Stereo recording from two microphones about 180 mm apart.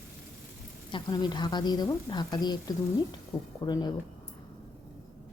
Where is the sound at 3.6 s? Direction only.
20° left (ahead or behind).